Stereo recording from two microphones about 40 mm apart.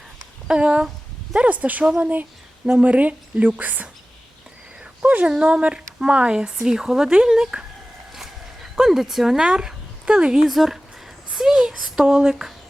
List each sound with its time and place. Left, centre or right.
0.4 s speech: right
1.4 s a woman's voice: right
5.0 s a woman's voice: right
5.3 s speech: right
8.1 s a sound: centre
8.8 s speech: centre
10.4 s speech: centre
12.0 s speech: right